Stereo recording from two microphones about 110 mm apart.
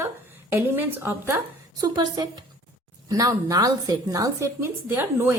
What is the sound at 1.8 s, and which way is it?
A woman's voice, 35° right (ahead or behind).